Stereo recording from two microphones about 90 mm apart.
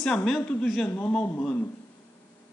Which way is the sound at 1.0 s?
20° left (ahead or behind).